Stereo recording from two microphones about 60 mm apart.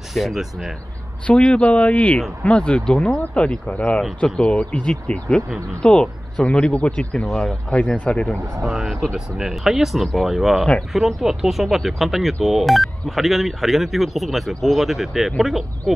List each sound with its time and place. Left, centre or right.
0.1 s speech: centre
1.2 s speech: centre
7.2 s speech: centre
7.7 s speech: left
8.6 s speech: centre